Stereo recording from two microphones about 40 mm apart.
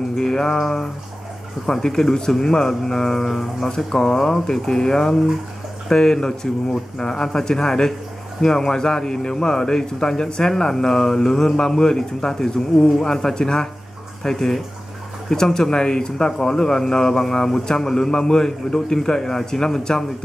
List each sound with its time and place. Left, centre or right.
0.2 s speech: centre